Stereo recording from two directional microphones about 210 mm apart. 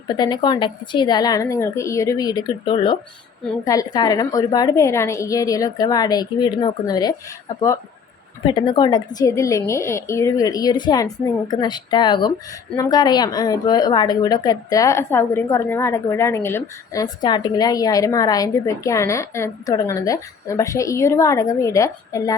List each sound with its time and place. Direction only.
0.1 s a woman's voice: 20° left (ahead or behind)
8.4 s a woman's voice: 25° left (ahead or behind)